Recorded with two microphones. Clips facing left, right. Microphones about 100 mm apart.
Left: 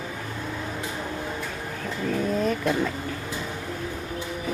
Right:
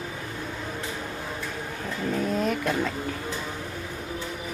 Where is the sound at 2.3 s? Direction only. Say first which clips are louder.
Left 3 dB; centre (ahead or behind).